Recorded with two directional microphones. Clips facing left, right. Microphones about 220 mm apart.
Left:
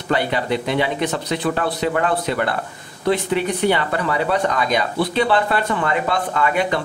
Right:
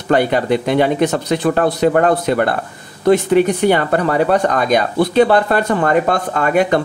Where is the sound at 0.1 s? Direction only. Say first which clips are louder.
Right 6 dB; 50° right (ahead or behind).